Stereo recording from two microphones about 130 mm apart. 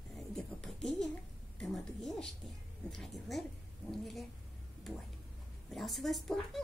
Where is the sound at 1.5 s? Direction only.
5° left (ahead or behind).